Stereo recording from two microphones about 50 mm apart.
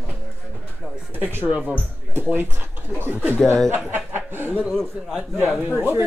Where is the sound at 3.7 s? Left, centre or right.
Right.